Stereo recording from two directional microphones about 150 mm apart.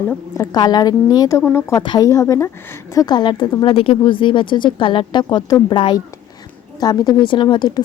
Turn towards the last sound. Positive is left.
turn(degrees=30)  # may be behind; listen again after turning